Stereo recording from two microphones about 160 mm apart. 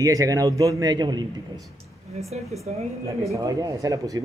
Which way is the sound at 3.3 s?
20° right (ahead or behind).